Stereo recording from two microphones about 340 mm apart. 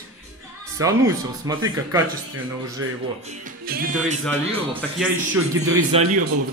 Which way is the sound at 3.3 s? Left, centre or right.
Right.